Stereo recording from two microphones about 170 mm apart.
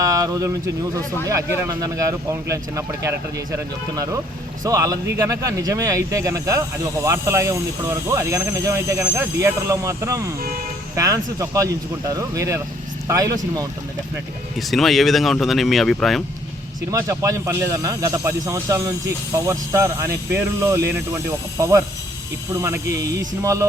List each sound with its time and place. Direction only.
0.0 s speech: 20° right (ahead or behind)
14.7 s speech: centre (ahead or behind)
16.9 s speech: 20° right (ahead or behind)